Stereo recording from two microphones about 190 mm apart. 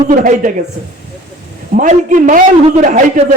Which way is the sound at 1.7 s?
40° right (ahead or behind).